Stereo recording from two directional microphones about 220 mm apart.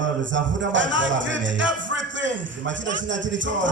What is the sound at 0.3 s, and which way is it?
Music, 55° right (ahead or behind).